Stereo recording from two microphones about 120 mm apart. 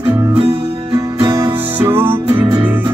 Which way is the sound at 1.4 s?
20° right (ahead or behind).